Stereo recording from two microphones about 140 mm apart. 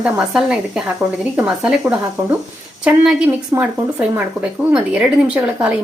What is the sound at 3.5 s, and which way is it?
Speech, 10° right (ahead or behind).